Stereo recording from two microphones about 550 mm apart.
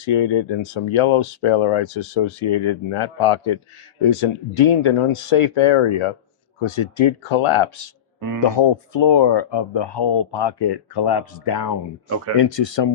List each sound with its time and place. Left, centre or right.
0.1 s speech: left
8.4 s speech: left